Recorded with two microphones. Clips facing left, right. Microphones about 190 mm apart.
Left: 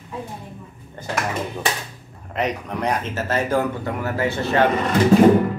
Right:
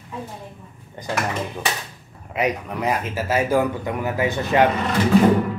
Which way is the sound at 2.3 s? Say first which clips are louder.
Right 1 dB; 5° right (ahead or behind).